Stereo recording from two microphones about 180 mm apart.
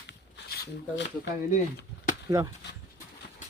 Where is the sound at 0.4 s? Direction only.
60° left (ahead or behind).